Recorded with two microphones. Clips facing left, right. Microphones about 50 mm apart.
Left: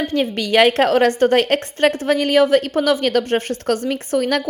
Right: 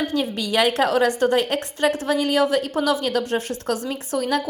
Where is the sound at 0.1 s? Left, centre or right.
Left.